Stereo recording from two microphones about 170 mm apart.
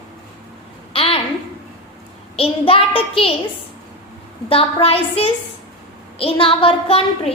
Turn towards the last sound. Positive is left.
turn(degrees=35)  # may be behind; listen again after turning